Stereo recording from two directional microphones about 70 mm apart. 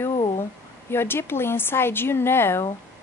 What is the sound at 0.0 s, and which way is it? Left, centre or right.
A woman's voice, left.